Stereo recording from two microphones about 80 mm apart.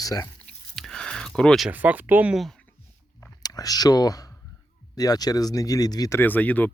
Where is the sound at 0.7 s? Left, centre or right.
Centre.